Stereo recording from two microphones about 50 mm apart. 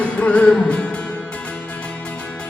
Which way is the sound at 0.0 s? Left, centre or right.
Left.